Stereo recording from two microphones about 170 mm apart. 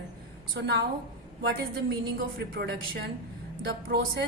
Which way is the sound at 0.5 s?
90° right.